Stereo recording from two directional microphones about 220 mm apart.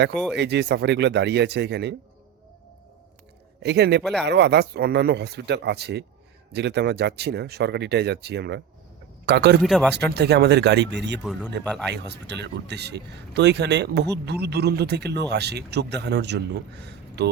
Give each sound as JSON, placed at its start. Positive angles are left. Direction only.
{"t": 0.3, "sound": "speech", "side_deg": -50}
{"t": 3.6, "sound": "speech", "side_deg": -50}
{"t": 9.6, "sound": "speech", "side_deg": 0}
{"t": 9.9, "sound": "speech", "side_deg": -50}
{"t": 11.2, "sound": "speech", "side_deg": 0}
{"t": 11.9, "sound": "speech", "side_deg": -50}